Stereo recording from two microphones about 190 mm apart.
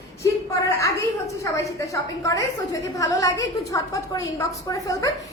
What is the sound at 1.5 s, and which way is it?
A woman's voice, 15° left (ahead or behind).